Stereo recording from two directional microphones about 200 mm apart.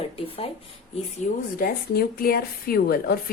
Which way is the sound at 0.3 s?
30° left (ahead or behind).